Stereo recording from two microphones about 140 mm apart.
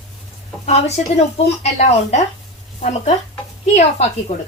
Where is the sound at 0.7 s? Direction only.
50° left (ahead or behind).